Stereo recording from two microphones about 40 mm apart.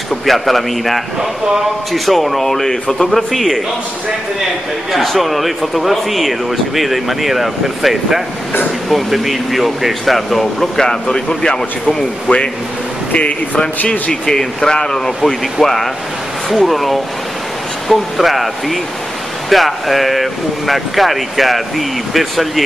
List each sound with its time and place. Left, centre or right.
0.1 s speech: centre
4.9 s speech: centre
12.3 s speech: left
13.8 s speech: left; by 22.5 s centre